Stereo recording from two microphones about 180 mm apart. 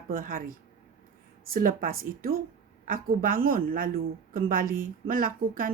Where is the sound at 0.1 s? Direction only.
50° right (ahead or behind).